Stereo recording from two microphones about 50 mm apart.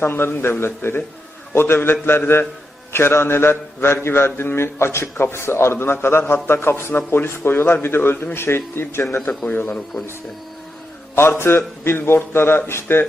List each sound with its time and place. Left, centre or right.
0.0 s a man's voice: left
2.9 s mantra: left
9.5 s a man's voice: left
11.1 s a man's voice: left